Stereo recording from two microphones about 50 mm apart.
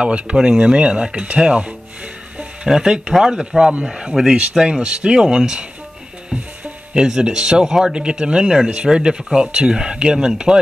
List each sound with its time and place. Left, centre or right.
0.0 s speech: right
2.3 s speech: centre
4.8 s speech: centre
6.6 s music: centre
7.1 s speech: centre